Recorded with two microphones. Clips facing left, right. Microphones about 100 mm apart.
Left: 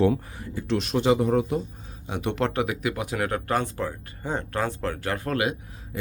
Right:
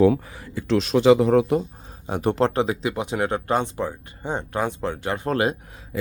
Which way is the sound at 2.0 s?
40° right (ahead or behind).